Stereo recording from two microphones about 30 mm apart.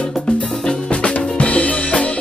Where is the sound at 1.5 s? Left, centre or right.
Left.